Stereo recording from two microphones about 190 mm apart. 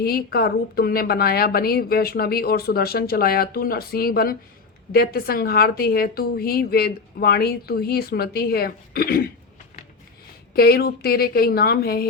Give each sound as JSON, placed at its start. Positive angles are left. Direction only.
{"t": 0.0, "sound": "a woman's voice", "side_deg": 50}
{"t": 10.5, "sound": "a woman's voice", "side_deg": 55}